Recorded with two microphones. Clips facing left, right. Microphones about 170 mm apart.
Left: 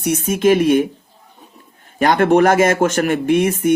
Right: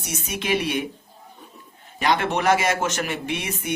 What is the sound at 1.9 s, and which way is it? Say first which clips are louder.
Speech: left 10 dB; 50° left (ahead or behind).